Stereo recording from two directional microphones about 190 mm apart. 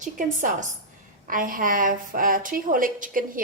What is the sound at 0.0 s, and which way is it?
A woman's voice, 45° right (ahead or behind).